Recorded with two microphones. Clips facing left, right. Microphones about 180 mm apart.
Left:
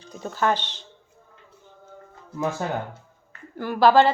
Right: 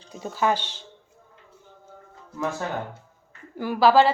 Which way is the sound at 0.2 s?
10° right (ahead or behind).